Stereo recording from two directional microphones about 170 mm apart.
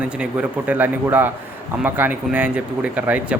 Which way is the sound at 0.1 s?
5° right (ahead or behind).